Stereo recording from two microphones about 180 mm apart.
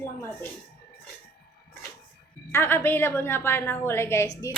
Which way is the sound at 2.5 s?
10° left (ahead or behind).